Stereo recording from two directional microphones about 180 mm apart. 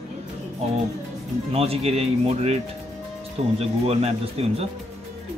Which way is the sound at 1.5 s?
35° right (ahead or behind).